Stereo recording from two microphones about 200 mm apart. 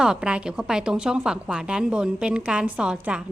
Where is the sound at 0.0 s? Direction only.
5° right (ahead or behind).